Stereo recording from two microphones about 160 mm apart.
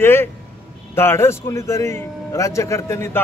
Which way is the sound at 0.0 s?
15° left (ahead or behind).